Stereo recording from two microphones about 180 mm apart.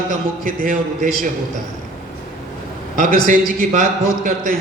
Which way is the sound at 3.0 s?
50° right (ahead or behind).